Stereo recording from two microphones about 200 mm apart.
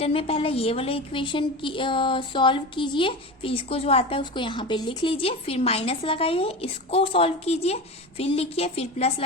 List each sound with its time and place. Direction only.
0.0 s a woman's voice: 30° left (ahead or behind)